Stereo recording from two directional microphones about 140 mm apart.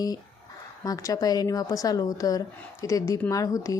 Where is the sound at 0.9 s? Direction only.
25° left (ahead or behind).